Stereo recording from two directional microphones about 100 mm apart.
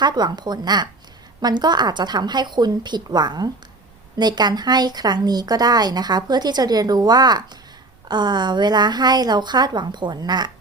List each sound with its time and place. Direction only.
0.0 s speech: 45° right (ahead or behind)